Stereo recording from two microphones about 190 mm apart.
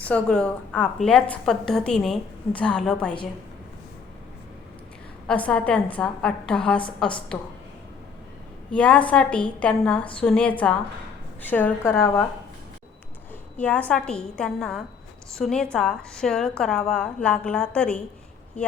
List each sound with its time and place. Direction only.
0.0 s a woman's voice: 5° left (ahead or behind)
5.3 s a woman's voice: 5° left (ahead or behind)
8.7 s a woman's voice: 5° left (ahead or behind)
13.6 s a woman's voice: 5° left (ahead or behind)